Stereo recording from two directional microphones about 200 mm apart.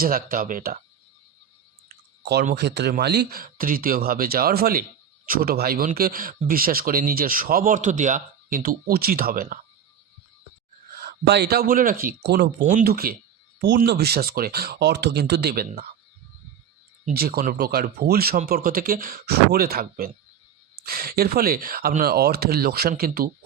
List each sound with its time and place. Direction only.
0.0 s speech: 45° right (ahead or behind)
2.2 s speech: 55° right (ahead or behind)
11.0 s speech: 55° right (ahead or behind)
17.1 s speech: 50° right (ahead or behind)